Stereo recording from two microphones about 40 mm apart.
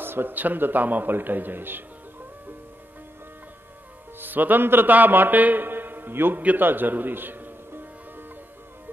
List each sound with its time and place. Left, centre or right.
0.0 s a man's voice: right
4.2 s a man's voice: right
6.4 s music: right